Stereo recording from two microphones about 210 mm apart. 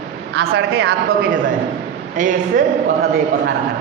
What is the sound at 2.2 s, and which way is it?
Speech, 40° right (ahead or behind).